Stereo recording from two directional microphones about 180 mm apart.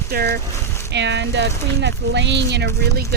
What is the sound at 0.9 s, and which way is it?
Speech, 75° right (ahead or behind).